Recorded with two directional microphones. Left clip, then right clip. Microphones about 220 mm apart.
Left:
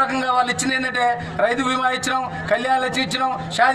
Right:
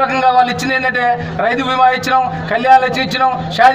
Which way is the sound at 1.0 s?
45° left (ahead or behind).